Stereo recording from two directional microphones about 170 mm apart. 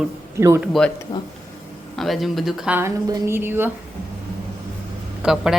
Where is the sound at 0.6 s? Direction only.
Centre (ahead or behind).